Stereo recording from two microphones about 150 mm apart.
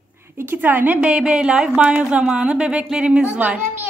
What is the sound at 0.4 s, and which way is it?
Speech, 15° right (ahead or behind).